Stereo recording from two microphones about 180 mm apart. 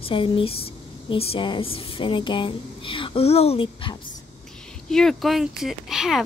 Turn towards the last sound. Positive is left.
turn(degrees=0)  # may be behind; listen again after turning